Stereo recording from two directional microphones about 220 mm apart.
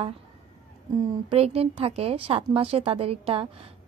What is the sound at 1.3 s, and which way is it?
A woman's voice, 25° right (ahead or behind).